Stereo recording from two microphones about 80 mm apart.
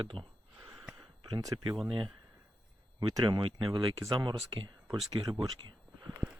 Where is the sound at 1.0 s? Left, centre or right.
Right.